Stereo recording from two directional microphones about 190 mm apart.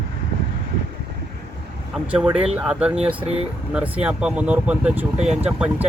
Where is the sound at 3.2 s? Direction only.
30° right (ahead or behind).